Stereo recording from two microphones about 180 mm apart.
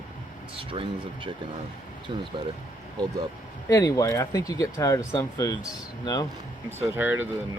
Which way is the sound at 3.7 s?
15° left (ahead or behind).